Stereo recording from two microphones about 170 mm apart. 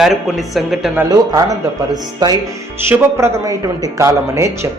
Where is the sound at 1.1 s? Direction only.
20° right (ahead or behind).